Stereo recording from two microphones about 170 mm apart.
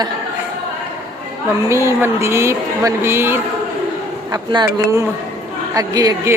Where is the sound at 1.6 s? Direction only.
15° right (ahead or behind).